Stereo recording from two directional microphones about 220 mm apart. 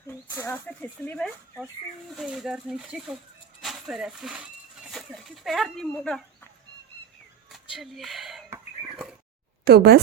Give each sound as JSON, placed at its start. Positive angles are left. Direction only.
{"t": 0.3, "sound": "speech", "side_deg": 10}
{"t": 7.5, "sound": "a sound", "side_deg": 0}
{"t": 9.6, "sound": "speech", "side_deg": -45}